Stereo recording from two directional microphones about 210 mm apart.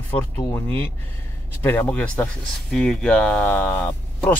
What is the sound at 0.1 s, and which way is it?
Speech, 10° left (ahead or behind).